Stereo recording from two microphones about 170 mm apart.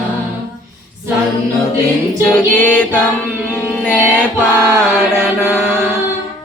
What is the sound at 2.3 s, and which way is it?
Female singing, 10° left (ahead or behind).